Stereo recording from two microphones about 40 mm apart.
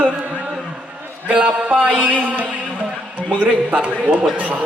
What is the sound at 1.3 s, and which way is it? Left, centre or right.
Music, right.